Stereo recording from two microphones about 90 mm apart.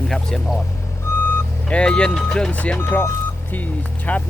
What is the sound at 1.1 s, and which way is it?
Vehicle, 30° left (ahead or behind).